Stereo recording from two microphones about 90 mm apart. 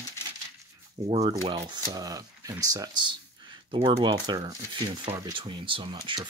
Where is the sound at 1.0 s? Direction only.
60° right (ahead or behind).